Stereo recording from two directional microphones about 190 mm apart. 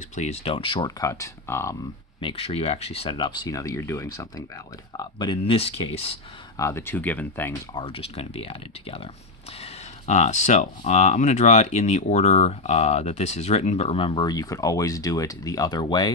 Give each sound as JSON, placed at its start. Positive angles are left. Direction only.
{"t": 0.1, "sound": "speech", "side_deg": 35}
{"t": 2.1, "sound": "speech", "side_deg": 30}
{"t": 6.5, "sound": "speech", "side_deg": 15}
{"t": 7.7, "sound": "speech", "side_deg": 30}